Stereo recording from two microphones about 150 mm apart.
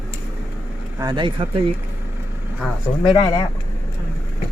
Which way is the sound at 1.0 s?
30° right (ahead or behind).